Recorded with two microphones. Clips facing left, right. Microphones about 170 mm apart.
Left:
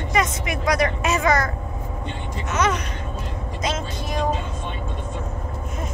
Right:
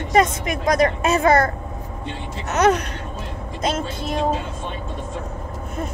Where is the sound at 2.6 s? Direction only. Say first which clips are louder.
Right 6 dB; 60° right (ahead or behind).